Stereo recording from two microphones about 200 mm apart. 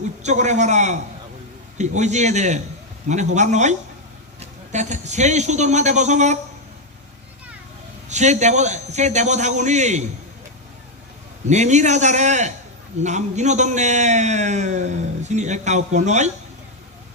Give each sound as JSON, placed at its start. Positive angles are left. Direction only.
{"t": 0.2, "sound": "a man's voice", "side_deg": -35}
{"t": 2.0, "sound": "a man's voice", "side_deg": -35}
{"t": 8.0, "sound": "a man's voice", "side_deg": -35}
{"t": 11.4, "sound": "a man's voice", "side_deg": -35}